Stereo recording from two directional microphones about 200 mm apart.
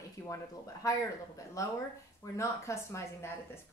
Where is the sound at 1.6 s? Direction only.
15° left (ahead or behind).